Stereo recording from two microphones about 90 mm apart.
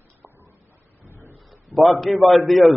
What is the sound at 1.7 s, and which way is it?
A man's voice, centre (ahead or behind).